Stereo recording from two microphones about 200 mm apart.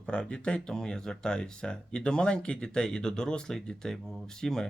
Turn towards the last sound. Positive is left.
turn(degrees=5)  # may be behind; listen again after turning